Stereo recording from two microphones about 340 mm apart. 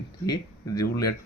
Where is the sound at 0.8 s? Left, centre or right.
Left.